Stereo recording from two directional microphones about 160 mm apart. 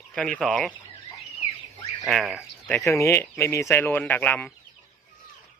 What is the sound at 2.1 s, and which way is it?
Speech, centre (ahead or behind).